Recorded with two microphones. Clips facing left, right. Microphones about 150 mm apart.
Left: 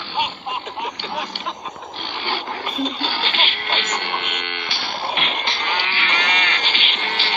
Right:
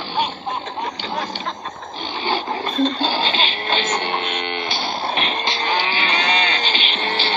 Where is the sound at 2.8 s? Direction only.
35° right (ahead or behind).